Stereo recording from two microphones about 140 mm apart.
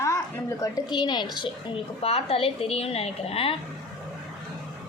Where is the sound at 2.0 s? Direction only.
45° left (ahead or behind).